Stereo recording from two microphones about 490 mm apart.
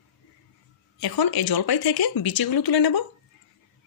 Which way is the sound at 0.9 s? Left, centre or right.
Left.